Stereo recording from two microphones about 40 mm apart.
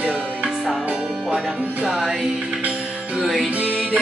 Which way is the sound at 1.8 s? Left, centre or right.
Centre.